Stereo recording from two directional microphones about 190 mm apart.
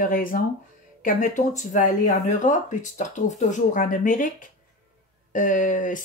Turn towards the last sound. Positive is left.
turn(degrees=45)  # may be behind; listen again after turning